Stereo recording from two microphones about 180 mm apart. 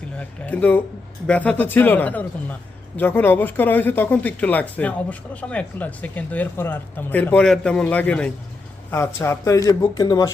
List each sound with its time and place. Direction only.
0.2 s speech: 10° left (ahead or behind)